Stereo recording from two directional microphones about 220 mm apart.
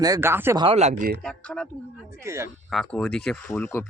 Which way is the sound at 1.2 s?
5° left (ahead or behind).